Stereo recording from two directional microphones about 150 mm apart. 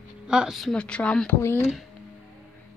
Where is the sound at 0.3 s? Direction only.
5° right (ahead or behind); by 1.7 s 15° left (ahead or behind).